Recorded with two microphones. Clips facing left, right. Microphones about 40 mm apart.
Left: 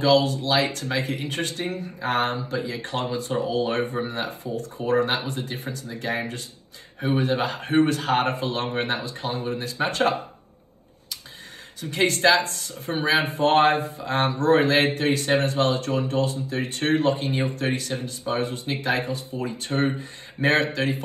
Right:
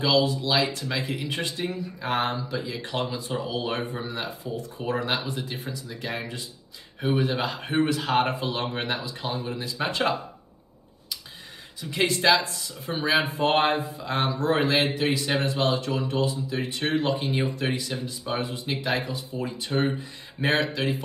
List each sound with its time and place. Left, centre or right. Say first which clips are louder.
0.0 s a man's voice: left 3 dB; left
11.8 s a man's voice: left 3 dB; left
13.4 s speech: left 6 dB; right
13.7 s a man's voice: left 4 dB; left